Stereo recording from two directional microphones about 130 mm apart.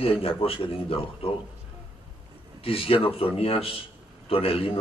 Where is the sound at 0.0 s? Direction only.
45° left (ahead or behind).